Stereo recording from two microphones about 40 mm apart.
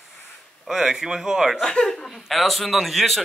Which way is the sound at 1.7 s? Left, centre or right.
Centre.